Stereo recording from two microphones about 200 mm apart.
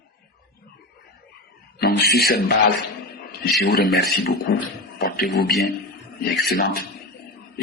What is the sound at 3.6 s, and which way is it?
Speech, 50° left (ahead or behind).